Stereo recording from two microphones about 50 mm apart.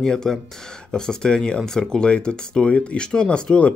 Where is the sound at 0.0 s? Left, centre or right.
Centre.